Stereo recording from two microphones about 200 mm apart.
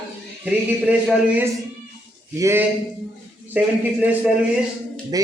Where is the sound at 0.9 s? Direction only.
5° right (ahead or behind).